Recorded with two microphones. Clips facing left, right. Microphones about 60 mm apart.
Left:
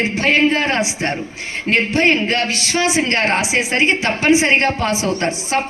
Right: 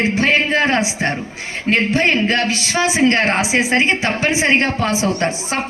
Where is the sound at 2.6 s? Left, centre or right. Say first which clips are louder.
Right 2 dB; centre.